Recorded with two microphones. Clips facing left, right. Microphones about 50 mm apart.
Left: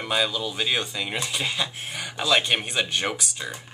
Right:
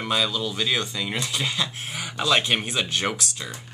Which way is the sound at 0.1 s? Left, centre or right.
Centre.